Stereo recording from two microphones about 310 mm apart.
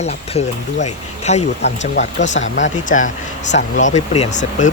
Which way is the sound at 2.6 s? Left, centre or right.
Left.